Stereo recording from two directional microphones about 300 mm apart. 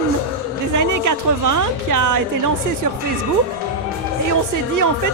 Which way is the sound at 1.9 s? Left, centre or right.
Right.